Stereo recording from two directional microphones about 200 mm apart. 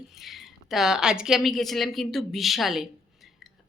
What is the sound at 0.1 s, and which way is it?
A woman's voice, centre (ahead or behind).